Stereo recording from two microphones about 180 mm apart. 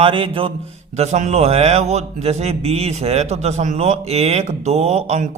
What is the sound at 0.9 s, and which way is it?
Speech, 40° right (ahead or behind).